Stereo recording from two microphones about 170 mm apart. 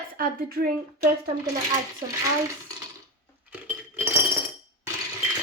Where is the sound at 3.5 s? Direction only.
10° right (ahead or behind).